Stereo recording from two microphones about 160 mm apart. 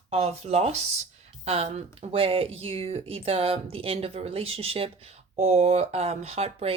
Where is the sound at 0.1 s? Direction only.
45° right (ahead or behind).